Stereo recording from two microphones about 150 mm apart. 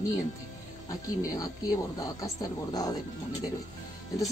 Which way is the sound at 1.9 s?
25° left (ahead or behind).